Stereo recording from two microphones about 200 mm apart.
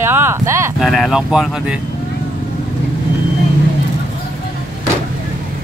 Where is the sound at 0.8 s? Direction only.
Centre (ahead or behind).